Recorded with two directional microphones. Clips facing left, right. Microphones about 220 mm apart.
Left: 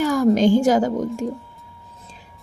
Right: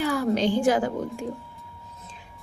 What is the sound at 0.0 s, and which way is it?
Speech, 45° left (ahead or behind).